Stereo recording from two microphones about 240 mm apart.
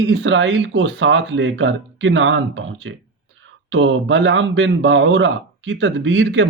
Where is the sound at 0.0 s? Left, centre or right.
Right.